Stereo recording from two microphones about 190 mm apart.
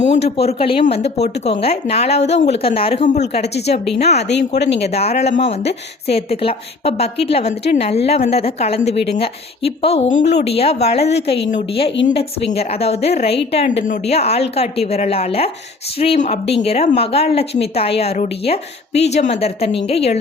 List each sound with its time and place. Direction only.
0.0 s a woman's voice: 35° left (ahead or behind)
4.3 s speech: 65° left (ahead or behind)
4.8 s a woman's voice: 35° left (ahead or behind)